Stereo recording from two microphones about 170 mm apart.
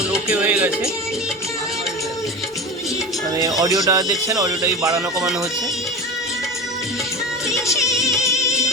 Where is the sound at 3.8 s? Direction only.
20° right (ahead or behind).